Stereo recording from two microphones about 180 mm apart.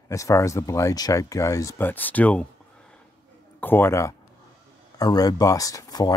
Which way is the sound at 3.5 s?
10° left (ahead or behind).